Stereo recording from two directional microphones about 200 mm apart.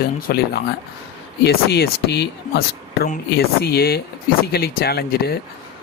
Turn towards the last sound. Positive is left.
turn(degrees=50)  # may be behind; listen again after turning